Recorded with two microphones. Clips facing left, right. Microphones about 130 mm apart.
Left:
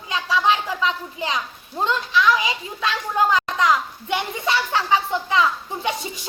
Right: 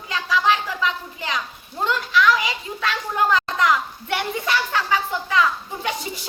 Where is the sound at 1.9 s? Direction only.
20° left (ahead or behind).